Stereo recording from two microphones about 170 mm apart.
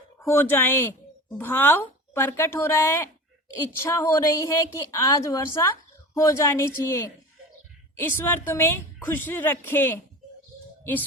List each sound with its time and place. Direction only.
0.2 s a woman's voice: 15° left (ahead or behind)